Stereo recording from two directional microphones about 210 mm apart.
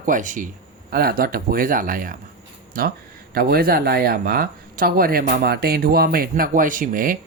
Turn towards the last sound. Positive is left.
turn(degrees=-40)  # may be behind; listen again after turning